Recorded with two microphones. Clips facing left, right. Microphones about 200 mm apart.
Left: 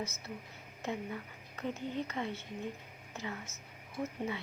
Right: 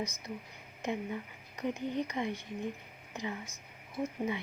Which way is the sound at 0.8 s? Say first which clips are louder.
Right 3 dB; 15° right (ahead or behind).